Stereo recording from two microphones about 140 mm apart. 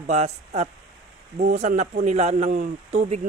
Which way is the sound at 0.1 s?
50° right (ahead or behind).